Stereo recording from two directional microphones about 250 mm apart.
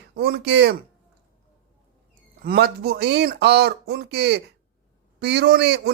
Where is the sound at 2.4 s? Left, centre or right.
Right.